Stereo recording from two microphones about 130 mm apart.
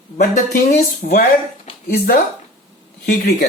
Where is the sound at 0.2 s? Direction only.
70° left (ahead or behind).